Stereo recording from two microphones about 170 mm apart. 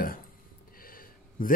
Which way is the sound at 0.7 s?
55° left (ahead or behind).